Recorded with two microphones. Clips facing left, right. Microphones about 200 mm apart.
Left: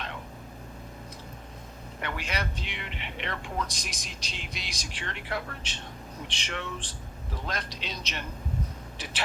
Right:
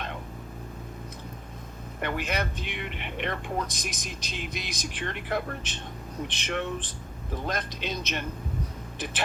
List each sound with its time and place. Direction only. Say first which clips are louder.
2.0 s speech: right 4 dB; 50° right (ahead or behind)